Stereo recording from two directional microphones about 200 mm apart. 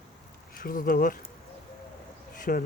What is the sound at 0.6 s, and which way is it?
Speech, 45° left (ahead or behind).